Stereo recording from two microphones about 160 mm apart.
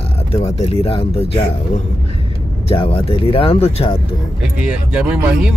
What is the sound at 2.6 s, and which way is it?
Speech, 35° left (ahead or behind).